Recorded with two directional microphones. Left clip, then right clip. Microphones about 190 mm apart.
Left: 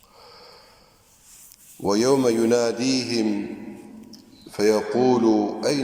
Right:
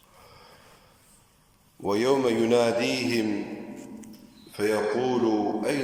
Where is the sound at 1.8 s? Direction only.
20° left (ahead or behind).